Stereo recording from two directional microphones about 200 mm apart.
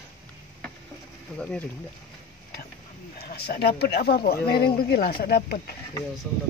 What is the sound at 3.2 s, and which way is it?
Speech, 50° left (ahead or behind).